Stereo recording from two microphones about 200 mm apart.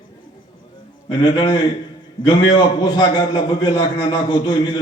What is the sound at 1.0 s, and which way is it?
A man's voice, 25° left (ahead or behind).